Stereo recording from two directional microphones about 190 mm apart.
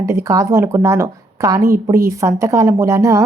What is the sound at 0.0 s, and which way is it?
Speech, 15° right (ahead or behind).